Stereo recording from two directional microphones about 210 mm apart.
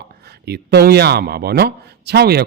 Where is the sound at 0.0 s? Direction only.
50° right (ahead or behind).